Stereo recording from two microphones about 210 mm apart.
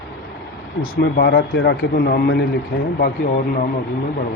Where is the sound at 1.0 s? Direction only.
55° left (ahead or behind).